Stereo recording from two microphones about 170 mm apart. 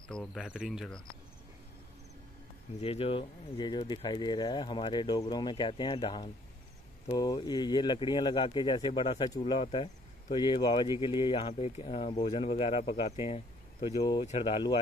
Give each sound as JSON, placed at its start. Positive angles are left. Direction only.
{"t": 0.1, "sound": "speech", "side_deg": 5}
{"t": 2.8, "sound": "speech", "side_deg": 35}